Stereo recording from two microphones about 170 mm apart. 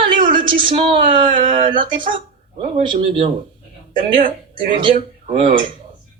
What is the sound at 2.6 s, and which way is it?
Speech, 35° right (ahead or behind).